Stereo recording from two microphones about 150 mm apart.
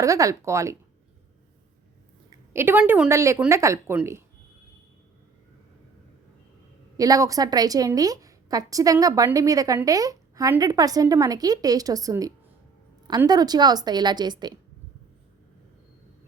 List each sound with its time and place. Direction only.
0.0 s a woman's voice: 20° right (ahead or behind)
2.5 s a woman's voice: 15° right (ahead or behind)
6.9 s a woman's voice: 25° right (ahead or behind)